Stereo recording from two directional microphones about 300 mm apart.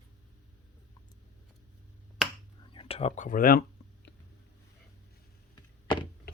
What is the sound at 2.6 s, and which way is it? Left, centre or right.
Speech, centre.